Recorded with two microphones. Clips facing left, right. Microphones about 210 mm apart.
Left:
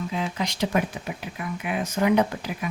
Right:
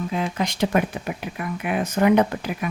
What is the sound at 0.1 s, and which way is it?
Speech, 55° right (ahead or behind).